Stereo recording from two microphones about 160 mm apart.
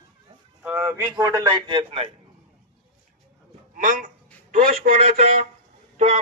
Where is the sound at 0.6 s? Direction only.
10° right (ahead or behind); by 2.1 s 35° right (ahead or behind).